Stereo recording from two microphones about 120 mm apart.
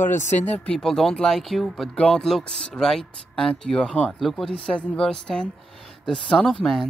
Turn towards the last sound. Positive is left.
turn(degrees=0)  # may be behind; listen again after turning